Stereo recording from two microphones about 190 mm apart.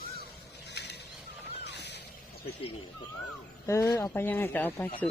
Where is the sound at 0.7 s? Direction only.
65° left (ahead or behind).